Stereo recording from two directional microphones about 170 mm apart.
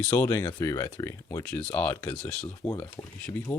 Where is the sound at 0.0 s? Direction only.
10° left (ahead or behind).